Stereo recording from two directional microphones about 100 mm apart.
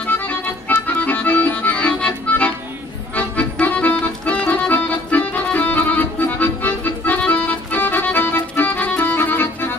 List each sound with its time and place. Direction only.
0.0 s accordion: 20° left (ahead or behind)